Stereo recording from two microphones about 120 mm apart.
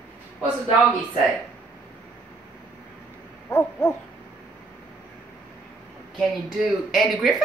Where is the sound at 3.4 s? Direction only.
15° left (ahead or behind).